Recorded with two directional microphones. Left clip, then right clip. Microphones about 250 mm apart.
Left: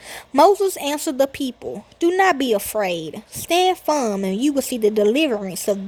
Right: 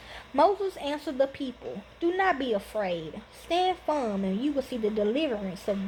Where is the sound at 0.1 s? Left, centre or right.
Left.